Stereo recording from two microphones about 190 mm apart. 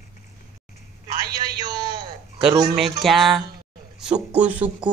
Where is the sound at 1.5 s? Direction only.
20° right (ahead or behind).